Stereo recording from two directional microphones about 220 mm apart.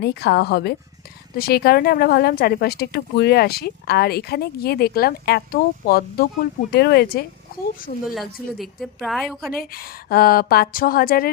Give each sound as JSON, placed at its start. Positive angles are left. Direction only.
{"t": 0.0, "sound": "speech", "side_deg": 50}
{"t": 8.1, "sound": "a woman's voice", "side_deg": 0}
{"t": 9.6, "sound": "speech", "side_deg": 45}